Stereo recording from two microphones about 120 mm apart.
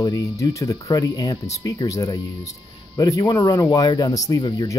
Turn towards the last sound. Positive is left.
turn(degrees=30)  # may be behind; listen again after turning